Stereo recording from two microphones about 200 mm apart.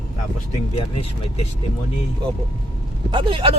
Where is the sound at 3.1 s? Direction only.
25° right (ahead or behind).